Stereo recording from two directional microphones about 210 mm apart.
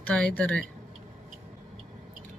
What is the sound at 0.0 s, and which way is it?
Speech, 5° left (ahead or behind).